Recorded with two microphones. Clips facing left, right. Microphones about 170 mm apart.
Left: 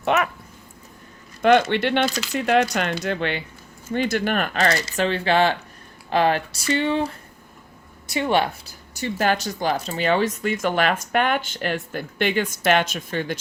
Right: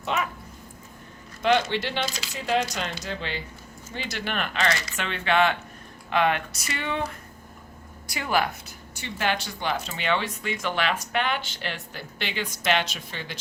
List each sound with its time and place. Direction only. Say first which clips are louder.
0.0 s dog: left 7 dB; 70° left (ahead or behind)
1.4 s speech: left 6 dB; 55° left (ahead or behind)
3.9 s speech: left 9 dB; 50° left (ahead or behind); by 8.7 s 25° left (ahead or behind)
9.0 s speech: left 6 dB; 45° left (ahead or behind)